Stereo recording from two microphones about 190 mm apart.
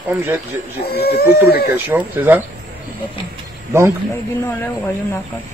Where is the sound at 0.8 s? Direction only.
55° left (ahead or behind).